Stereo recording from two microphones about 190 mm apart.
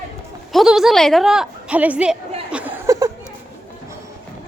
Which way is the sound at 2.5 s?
10° right (ahead or behind).